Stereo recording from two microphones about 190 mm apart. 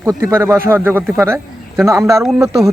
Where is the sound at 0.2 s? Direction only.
10° right (ahead or behind).